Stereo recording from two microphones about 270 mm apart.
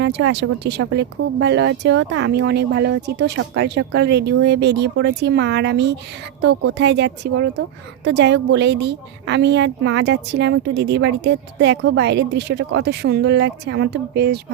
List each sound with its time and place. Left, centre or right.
0.0 s speech: right